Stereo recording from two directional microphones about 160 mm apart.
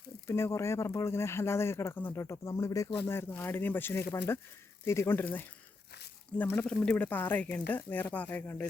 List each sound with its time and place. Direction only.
0.3 s speech: 15° left (ahead or behind)